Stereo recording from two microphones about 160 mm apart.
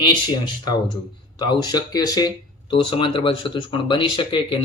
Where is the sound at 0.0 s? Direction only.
30° left (ahead or behind).